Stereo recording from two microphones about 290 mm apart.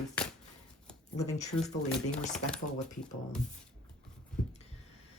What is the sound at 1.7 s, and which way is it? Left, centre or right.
Speech, centre.